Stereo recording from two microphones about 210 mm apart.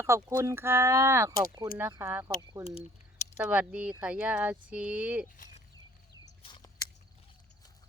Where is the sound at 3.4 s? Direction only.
5° right (ahead or behind).